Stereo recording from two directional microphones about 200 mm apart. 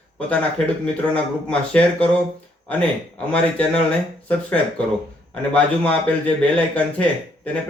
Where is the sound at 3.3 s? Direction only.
5° left (ahead or behind).